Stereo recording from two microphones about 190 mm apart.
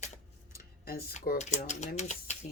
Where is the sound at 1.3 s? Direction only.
40° left (ahead or behind).